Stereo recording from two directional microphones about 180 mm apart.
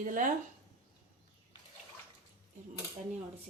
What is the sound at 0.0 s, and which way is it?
Speech, 45° right (ahead or behind).